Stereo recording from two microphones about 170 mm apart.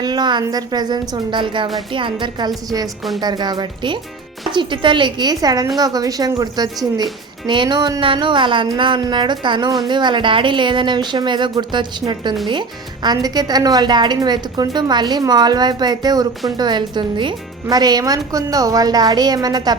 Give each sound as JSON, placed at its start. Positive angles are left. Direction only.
{"t": 0.0, "sound": "speech", "side_deg": -25}